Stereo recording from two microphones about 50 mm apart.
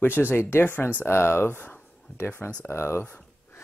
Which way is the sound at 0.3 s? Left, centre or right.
Left.